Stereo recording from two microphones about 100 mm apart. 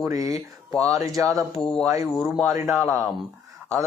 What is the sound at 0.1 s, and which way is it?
Speech, 35° right (ahead or behind).